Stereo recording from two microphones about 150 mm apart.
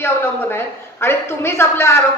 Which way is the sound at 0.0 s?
15° left (ahead or behind).